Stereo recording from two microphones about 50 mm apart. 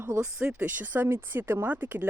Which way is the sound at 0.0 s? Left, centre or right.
Right.